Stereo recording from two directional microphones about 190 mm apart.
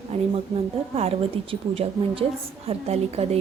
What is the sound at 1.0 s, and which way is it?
A woman's voice, 30° right (ahead or behind).